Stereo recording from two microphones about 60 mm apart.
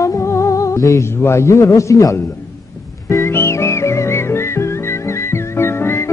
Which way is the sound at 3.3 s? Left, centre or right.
Left.